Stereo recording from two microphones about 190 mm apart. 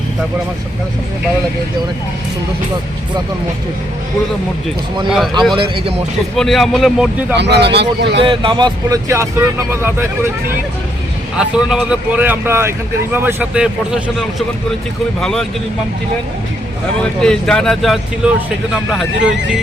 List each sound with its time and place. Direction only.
5.5 s speech: 30° right (ahead or behind)
6.3 s speech: centre (ahead or behind)
7.3 s speech: 65° right (ahead or behind)
8.2 s speech: 25° right (ahead or behind)
11.3 s speech: 5° right (ahead or behind)
17.0 s speech: 5° left (ahead or behind)